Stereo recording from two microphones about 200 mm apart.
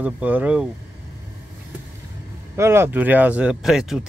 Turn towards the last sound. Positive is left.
turn(degrees=-5)  # may be behind; listen again after turning